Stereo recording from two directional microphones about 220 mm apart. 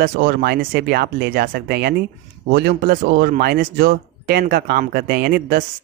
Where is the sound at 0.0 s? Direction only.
45° right (ahead or behind).